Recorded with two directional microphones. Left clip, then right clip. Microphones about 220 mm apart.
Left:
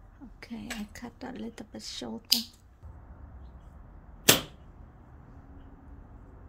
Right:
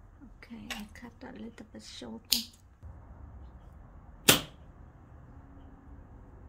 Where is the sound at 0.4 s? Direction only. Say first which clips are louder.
Left 2 dB; 40° left (ahead or behind).